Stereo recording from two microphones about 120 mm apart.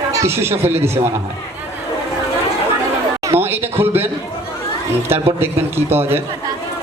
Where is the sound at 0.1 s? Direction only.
25° right (ahead or behind).